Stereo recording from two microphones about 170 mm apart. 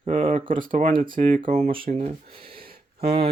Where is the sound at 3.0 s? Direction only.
35° right (ahead or behind).